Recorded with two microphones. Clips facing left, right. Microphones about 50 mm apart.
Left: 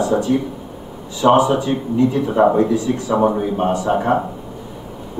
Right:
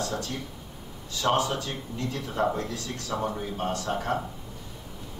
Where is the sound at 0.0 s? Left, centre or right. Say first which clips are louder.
Left 15 dB; centre.